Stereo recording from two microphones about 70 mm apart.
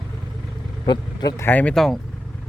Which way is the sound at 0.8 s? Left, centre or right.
Left.